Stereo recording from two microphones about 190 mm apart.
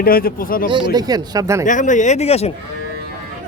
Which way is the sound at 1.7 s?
40° left (ahead or behind).